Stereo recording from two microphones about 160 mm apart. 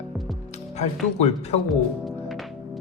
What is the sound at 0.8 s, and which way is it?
Speech, 45° left (ahead or behind).